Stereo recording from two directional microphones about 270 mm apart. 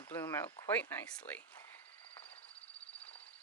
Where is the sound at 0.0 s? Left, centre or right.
Centre.